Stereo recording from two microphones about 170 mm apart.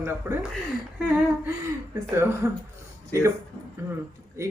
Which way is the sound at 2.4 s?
15° right (ahead or behind).